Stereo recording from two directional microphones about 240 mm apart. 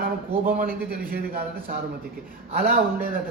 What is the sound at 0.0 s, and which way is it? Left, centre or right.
Speech, right.